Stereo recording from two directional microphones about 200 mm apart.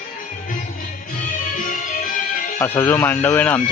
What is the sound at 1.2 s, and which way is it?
Music, 45° left (ahead or behind).